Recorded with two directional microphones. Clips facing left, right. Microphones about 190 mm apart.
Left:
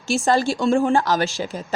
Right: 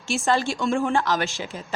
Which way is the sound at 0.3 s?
35° left (ahead or behind).